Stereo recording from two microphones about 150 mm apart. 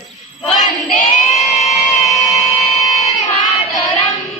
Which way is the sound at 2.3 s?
45° left (ahead or behind).